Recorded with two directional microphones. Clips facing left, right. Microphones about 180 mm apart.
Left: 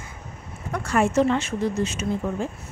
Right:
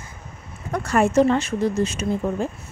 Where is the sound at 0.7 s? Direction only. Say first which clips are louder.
Right 2 dB; 40° right (ahead or behind).